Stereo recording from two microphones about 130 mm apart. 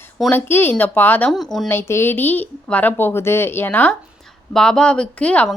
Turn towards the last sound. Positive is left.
turn(degrees=10)  # may be behind; listen again after turning